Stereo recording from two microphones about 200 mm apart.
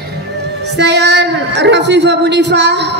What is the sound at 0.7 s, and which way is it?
A woman's voice, 60° right (ahead or behind).